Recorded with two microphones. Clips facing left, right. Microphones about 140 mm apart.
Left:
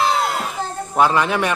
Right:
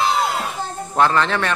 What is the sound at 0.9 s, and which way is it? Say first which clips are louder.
Speech: left 1 dB; 10° left (ahead or behind).